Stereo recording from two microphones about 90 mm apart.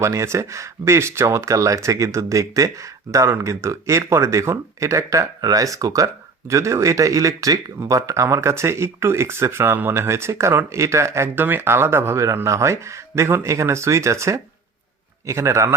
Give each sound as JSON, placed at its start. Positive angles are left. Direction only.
{"t": 0.0, "sound": "speech", "side_deg": -35}